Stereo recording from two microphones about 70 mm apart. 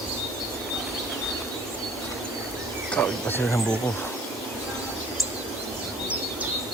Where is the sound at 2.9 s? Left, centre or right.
Left.